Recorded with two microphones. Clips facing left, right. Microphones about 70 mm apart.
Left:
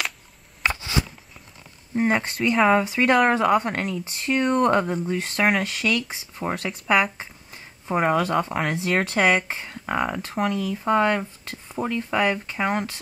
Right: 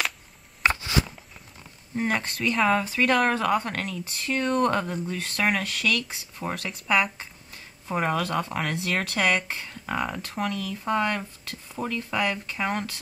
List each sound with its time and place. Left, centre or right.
2.0 s speech: centre
2.2 s speech: centre
9.3 s speech: centre
9.6 s speech: centre